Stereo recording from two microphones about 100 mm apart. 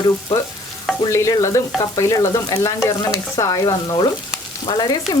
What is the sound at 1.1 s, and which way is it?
Stir, 30° left (ahead or behind).